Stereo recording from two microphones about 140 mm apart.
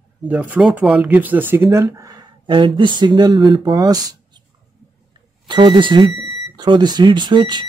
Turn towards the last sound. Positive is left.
turn(degrees=-35)  # may be behind; listen again after turning